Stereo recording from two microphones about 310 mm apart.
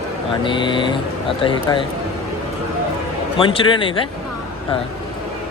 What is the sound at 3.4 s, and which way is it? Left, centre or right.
Speech, centre.